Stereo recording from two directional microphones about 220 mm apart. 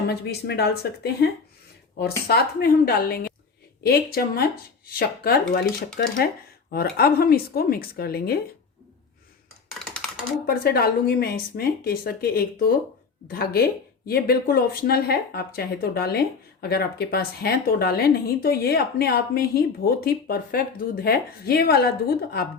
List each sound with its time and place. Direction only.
0.1 s speech: 45° left (ahead or behind)
9.7 s dishes: centre (ahead or behind)
10.4 s speech: 45° left (ahead or behind)